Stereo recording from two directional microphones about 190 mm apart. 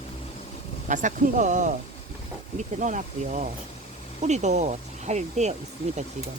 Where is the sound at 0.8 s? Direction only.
40° right (ahead or behind).